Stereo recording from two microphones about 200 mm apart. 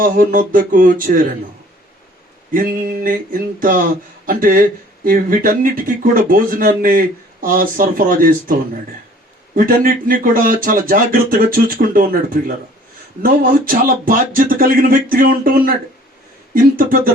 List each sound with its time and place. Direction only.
0.0 s speech: 45° right (ahead or behind)
2.5 s speech: 45° right (ahead or behind)
9.6 s speech: 45° right (ahead or behind)